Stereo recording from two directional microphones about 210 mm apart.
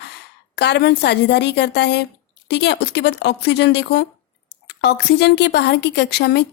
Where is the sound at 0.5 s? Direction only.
55° left (ahead or behind).